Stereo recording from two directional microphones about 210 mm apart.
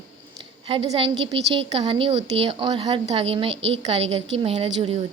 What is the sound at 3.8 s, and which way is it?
Speech, 30° right (ahead or behind).